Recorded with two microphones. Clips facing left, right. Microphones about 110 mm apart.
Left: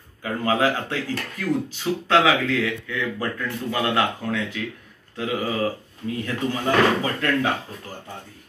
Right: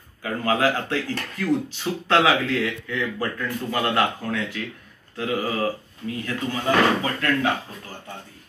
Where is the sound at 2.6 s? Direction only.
15° left (ahead or behind).